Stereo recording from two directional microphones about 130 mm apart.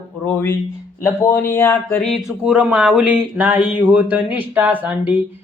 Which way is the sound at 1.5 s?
15° left (ahead or behind).